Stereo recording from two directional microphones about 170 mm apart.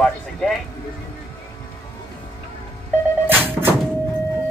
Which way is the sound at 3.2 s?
10° right (ahead or behind).